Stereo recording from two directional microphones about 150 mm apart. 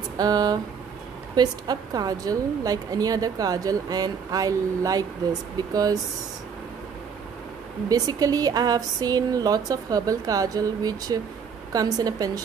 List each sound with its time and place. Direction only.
0.2 s a woman's voice: 25° right (ahead or behind)
7.9 s a woman's voice: 25° right (ahead or behind)